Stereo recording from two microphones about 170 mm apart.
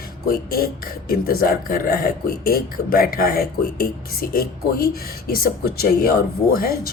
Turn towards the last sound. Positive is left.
turn(degrees=65)  # may be behind; listen again after turning